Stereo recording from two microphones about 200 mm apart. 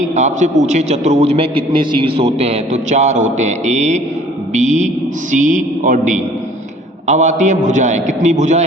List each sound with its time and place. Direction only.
0.2 s a man's voice: 35° right (ahead or behind)